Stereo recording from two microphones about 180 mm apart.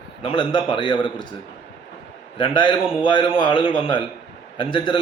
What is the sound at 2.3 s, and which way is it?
Speech, 30° left (ahead or behind).